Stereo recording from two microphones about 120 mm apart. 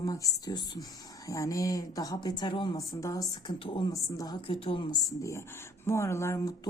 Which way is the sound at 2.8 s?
30° left (ahead or behind).